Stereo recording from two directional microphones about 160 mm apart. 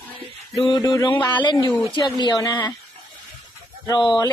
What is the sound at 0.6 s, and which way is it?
Speech, 25° left (ahead or behind).